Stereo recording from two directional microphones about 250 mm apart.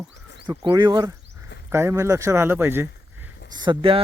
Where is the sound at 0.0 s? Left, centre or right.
Centre.